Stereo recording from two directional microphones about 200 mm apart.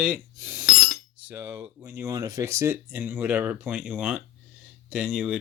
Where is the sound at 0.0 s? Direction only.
10° right (ahead or behind).